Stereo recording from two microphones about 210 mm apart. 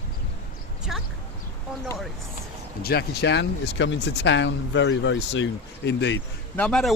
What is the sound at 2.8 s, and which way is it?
Speech, 50° left (ahead or behind).